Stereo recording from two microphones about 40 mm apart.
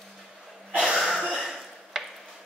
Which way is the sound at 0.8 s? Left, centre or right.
Centre.